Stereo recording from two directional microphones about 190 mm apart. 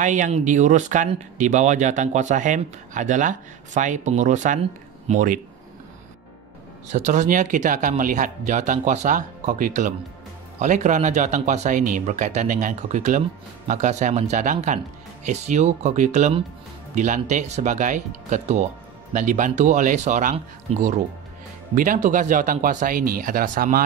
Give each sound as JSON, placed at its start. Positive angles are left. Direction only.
{"t": 0.0, "sound": "speech", "side_deg": -40}
{"t": 6.9, "sound": "speech", "side_deg": -40}
{"t": 21.7, "sound": "speech", "side_deg": -45}